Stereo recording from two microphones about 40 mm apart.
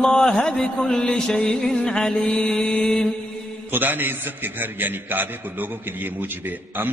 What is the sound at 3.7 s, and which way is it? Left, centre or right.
A man's voice, right.